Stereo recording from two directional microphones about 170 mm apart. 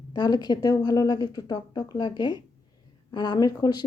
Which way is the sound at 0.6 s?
25° left (ahead or behind).